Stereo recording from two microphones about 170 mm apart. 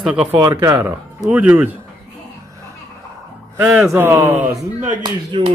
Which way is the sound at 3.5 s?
10° right (ahead or behind).